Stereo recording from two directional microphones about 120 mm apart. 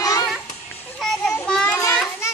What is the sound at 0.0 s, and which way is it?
Children playing, 30° left (ahead or behind).